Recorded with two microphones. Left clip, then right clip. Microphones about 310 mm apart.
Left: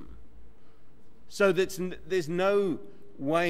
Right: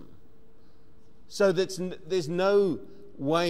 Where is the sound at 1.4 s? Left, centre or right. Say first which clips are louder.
Even; right.